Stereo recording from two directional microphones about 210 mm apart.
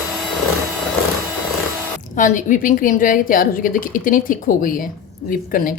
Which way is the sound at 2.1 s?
35° left (ahead or behind).